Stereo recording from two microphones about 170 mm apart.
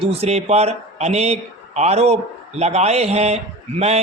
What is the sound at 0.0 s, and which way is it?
A man's voice, 35° right (ahead or behind).